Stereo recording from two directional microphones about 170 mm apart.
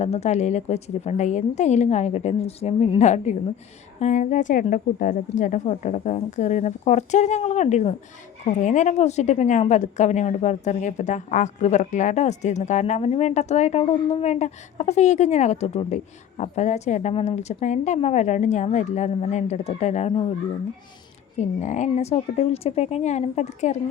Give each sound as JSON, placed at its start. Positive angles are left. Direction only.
{"t": 0.0, "sound": "a woman's voice", "side_deg": 40}
{"t": 21.6, "sound": "a woman's voice", "side_deg": 45}